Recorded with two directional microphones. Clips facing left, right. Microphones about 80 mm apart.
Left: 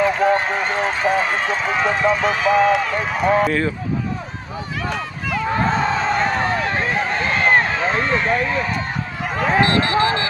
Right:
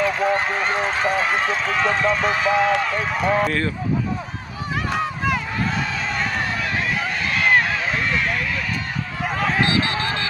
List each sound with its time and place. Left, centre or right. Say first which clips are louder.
0.1 s run: left 3 dB; centre
1.7 s a man's voice: left 3 dB; centre
5.5 s a sound: left 6 dB; left
9.6 s a man's voice: left 8 dB; centre